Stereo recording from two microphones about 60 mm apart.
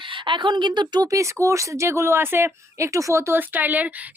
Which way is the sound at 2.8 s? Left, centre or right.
Right.